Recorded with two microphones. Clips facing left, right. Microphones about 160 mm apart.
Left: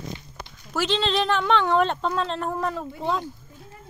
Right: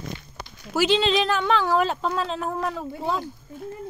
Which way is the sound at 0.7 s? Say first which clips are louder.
Right 3 dB; 5° right (ahead or behind).